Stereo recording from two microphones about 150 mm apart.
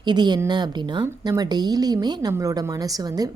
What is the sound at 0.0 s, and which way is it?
A woman's voice, 30° right (ahead or behind).